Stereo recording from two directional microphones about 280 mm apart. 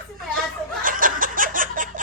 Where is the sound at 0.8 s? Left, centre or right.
Right.